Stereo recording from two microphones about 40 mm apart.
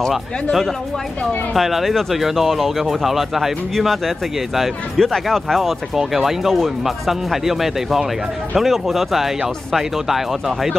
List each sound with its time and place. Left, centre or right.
1.5 s speech: centre